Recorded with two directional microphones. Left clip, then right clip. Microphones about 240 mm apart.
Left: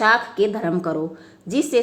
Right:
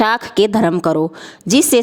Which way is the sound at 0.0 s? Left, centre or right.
Right.